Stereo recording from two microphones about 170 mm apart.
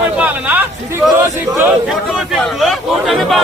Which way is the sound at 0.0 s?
10° right (ahead or behind).